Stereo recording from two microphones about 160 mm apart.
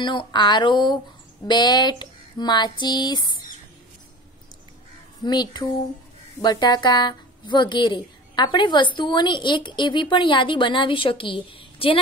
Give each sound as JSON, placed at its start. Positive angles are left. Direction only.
{"t": 0.0, "sound": "a woman's voice", "side_deg": 30}
{"t": 5.2, "sound": "a woman's voice", "side_deg": 25}